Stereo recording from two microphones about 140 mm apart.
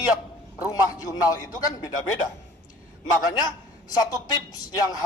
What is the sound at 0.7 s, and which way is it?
Speech, 25° left (ahead or behind).